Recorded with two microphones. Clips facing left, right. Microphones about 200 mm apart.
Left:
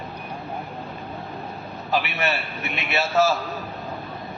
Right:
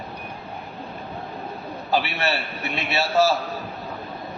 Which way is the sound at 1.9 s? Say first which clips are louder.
Right 1 dB; 30° right (ahead or behind).